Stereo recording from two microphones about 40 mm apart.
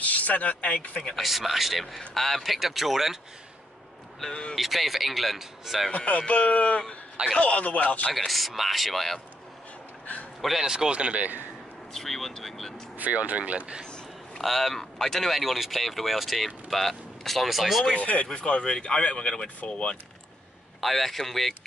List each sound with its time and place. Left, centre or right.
0.0 s speech: left
1.1 s speech: centre
4.3 s speech: left
4.6 s speech: centre
5.9 s speech: left
8.3 s speech: centre
10.6 s speech: centre
10.9 s speech: right
11.9 s speech: centre
12.9 s speech: right
13.8 s a sound: left
14.4 s speech: centre
17.9 s speech: left
20.8 s speech: centre